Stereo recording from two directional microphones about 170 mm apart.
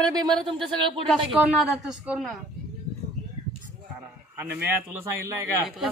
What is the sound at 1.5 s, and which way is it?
Speech, 5° right (ahead or behind).